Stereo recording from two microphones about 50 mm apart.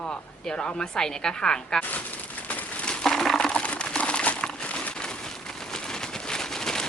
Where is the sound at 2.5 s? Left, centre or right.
Left.